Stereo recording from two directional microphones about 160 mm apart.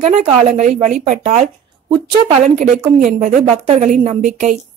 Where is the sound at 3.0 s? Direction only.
55° right (ahead or behind).